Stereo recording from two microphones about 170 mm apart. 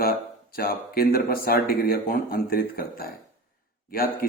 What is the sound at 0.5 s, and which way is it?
A man's voice, 60° left (ahead or behind).